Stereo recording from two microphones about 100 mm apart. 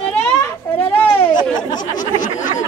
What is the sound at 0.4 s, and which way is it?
Children playing, 25° left (ahead or behind).